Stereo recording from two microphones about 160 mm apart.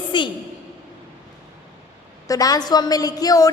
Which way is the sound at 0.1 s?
30° left (ahead or behind).